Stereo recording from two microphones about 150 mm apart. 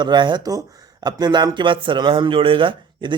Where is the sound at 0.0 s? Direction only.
30° right (ahead or behind).